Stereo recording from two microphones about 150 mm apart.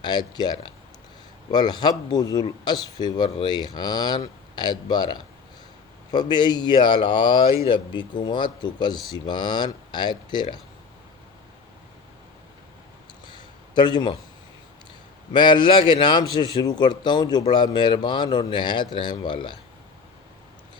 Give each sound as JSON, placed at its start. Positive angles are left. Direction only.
{"t": 0.0, "sound": "a man's voice", "side_deg": 25}
{"t": 13.2, "sound": "a sound", "side_deg": 30}
{"t": 15.3, "sound": "a man's voice", "side_deg": 30}